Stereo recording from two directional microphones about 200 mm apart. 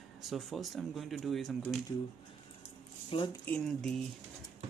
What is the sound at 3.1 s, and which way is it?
Speech, 25° left (ahead or behind).